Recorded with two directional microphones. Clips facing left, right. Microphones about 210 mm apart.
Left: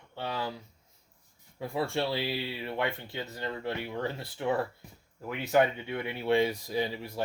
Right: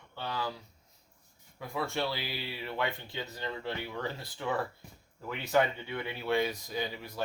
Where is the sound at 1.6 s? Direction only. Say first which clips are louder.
Left 3 dB; 30° left (ahead or behind).